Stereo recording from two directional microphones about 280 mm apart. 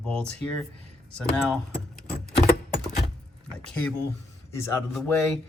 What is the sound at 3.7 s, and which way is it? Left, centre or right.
Speech, centre.